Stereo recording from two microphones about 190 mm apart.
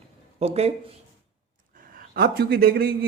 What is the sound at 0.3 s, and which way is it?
Speech, 35° right (ahead or behind).